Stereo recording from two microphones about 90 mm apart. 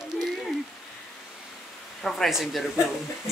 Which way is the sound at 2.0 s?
5° left (ahead or behind).